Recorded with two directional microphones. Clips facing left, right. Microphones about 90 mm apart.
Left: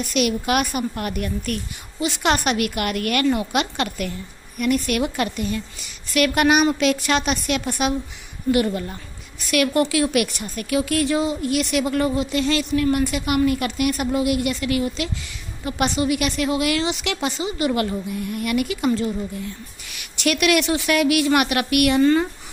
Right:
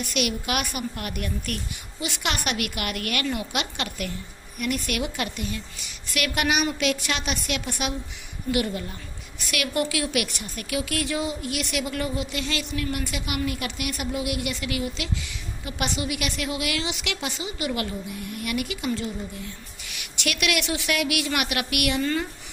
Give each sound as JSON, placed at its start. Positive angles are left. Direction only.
{"t": 0.1, "sound": "a woman's voice", "side_deg": 40}
{"t": 9.5, "sound": "a woman's voice", "side_deg": 40}
{"t": 20.1, "sound": "a woman's voice", "side_deg": 40}